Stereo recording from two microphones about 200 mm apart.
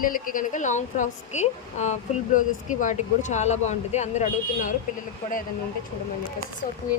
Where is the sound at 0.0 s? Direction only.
45° left (ahead or behind).